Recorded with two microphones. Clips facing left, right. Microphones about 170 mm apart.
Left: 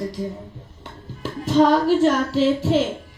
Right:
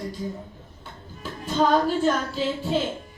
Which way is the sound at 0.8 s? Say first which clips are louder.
Left 6 dB; 80° left.